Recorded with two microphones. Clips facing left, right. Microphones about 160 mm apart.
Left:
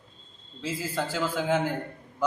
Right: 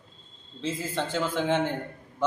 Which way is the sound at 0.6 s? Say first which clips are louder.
Right 1 dB; 10° left (ahead or behind).